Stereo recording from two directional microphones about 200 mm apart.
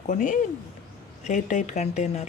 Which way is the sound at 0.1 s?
40° left (ahead or behind).